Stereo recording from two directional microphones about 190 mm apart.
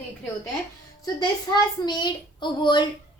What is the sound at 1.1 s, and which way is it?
A child's voice, 20° left (ahead or behind).